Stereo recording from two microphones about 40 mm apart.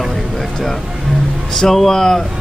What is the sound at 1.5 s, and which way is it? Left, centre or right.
Speech, centre.